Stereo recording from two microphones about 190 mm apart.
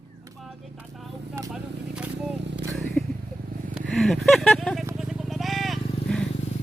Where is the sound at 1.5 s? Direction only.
5° right (ahead or behind).